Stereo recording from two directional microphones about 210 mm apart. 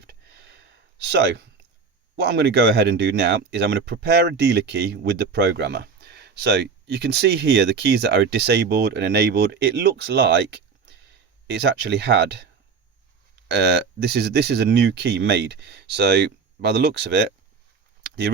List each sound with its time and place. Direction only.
0.3 s a sound: 55° right (ahead or behind)
2.1 s speech: 55° right (ahead or behind)
11.4 s speech: 50° right (ahead or behind)
13.5 s speech: 55° right (ahead or behind)